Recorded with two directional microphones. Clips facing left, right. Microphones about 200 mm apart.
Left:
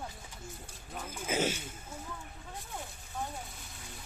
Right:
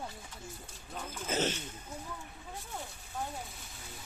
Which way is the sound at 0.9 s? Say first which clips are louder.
Left 1 dB; 10° left (ahead or behind).